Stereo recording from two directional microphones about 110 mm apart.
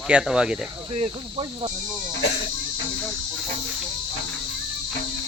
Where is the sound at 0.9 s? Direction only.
55° right (ahead or behind).